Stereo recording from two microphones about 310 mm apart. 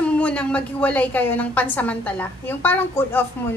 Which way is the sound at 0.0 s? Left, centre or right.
Centre.